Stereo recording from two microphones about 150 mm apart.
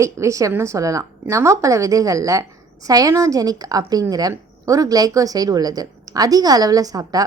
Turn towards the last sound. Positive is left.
turn(degrees=-25)  # may be behind; listen again after turning